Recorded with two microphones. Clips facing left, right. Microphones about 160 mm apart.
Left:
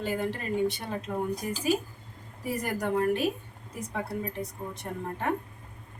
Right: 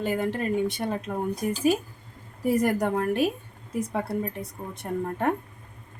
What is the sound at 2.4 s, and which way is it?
Speech, 55° right (ahead or behind).